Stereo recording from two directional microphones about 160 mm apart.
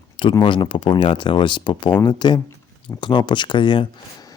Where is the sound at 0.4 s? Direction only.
30° left (ahead or behind).